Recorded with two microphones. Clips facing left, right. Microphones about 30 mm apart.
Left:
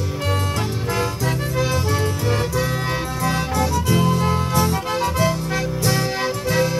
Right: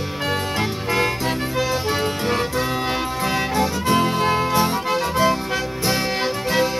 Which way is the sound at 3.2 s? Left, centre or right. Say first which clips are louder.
Even; right.